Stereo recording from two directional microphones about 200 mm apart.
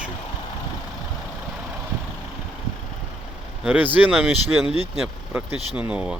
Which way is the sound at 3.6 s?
10° right (ahead or behind).